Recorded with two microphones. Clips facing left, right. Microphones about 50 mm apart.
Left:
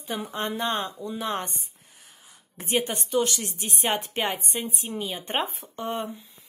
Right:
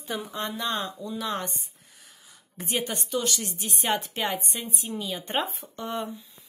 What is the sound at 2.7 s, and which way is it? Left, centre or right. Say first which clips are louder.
A woman's voice: left 4 dB; left.